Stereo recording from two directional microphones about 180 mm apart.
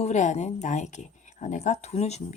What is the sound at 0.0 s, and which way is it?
A woman's voice, 40° left (ahead or behind).